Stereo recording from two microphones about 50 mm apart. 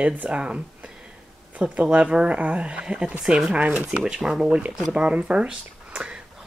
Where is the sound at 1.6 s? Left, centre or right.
Right; by 4.5 s centre.